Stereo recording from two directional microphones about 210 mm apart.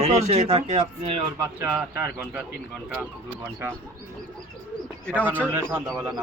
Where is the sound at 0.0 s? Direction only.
30° right (ahead or behind).